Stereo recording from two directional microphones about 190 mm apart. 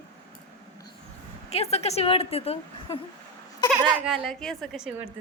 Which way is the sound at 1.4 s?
35° left (ahead or behind).